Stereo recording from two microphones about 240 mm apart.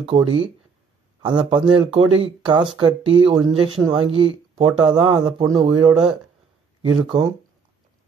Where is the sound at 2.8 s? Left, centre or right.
Right.